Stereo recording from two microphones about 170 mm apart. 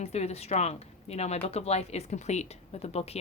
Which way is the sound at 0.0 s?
40° left (ahead or behind).